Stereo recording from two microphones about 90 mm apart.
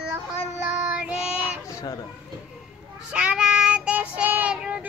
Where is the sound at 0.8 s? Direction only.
15° right (ahead or behind).